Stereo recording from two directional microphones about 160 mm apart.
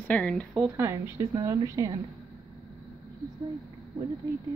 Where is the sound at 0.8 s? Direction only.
20° right (ahead or behind).